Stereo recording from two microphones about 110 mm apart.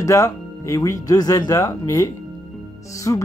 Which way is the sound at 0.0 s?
30° left (ahead or behind).